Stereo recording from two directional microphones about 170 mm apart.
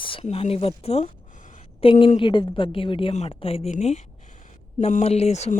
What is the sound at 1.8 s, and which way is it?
A woman's voice, 35° left (ahead or behind).